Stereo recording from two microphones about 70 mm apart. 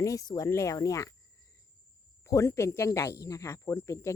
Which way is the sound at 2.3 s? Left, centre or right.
Left.